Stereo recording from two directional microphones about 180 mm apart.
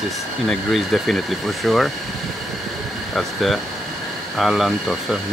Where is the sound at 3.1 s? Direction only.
Centre (ahead or behind).